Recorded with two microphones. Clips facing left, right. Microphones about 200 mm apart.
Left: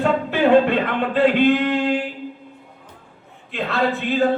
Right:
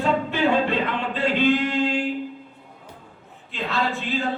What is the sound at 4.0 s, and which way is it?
Speech, 55° left (ahead or behind).